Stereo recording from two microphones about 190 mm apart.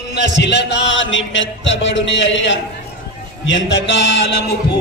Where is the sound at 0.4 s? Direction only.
65° left (ahead or behind).